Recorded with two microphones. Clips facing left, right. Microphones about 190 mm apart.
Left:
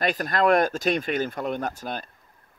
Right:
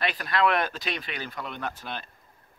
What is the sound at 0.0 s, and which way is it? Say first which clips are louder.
Speech: left 3 dB; 45° left (ahead or behind).